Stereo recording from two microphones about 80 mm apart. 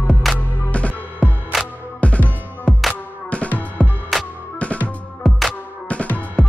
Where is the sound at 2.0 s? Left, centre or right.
Centre.